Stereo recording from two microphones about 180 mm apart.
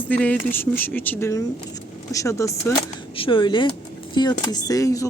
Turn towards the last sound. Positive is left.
turn(degrees=20)  # may be behind; listen again after turning